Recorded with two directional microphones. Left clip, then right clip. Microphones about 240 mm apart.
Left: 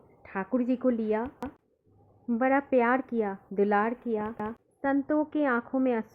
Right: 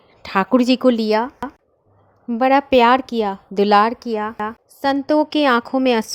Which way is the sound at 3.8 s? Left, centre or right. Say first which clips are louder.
Right 11 dB; right.